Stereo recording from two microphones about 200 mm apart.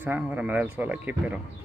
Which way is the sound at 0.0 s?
10° right (ahead or behind).